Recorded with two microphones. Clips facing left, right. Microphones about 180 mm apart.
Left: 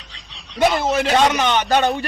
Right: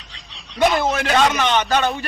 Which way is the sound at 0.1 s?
Centre (ahead or behind).